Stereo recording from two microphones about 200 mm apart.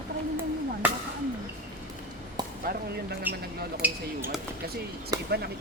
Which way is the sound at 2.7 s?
50° right (ahead or behind).